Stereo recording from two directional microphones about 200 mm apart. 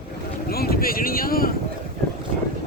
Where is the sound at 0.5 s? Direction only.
50° left (ahead or behind).